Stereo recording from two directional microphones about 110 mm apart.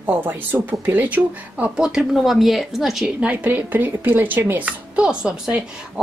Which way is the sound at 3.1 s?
15° right (ahead or behind).